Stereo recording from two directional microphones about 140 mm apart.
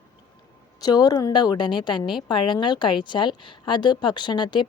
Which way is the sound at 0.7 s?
30° left (ahead or behind).